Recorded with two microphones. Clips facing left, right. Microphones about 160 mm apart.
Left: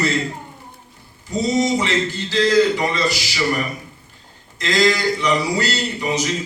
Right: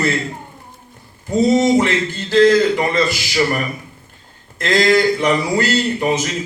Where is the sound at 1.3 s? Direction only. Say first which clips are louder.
Right 5 dB; 50° right (ahead or behind).